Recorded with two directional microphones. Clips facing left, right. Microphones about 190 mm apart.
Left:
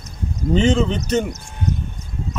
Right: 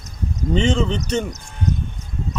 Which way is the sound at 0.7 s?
5° left (ahead or behind).